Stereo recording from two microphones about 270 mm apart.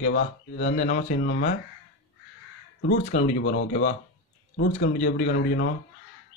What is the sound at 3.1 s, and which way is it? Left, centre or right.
Speech, left.